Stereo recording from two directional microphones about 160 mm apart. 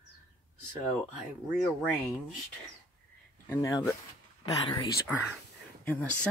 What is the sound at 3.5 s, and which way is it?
Speech, 20° left (ahead or behind).